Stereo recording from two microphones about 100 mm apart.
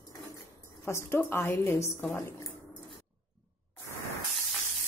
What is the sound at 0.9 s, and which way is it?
Speech, 25° left (ahead or behind).